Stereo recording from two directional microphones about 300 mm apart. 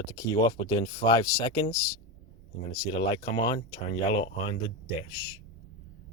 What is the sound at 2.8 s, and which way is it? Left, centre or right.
Speech, centre.